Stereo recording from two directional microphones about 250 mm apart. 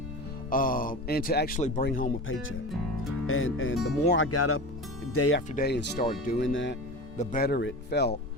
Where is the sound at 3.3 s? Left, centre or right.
Left.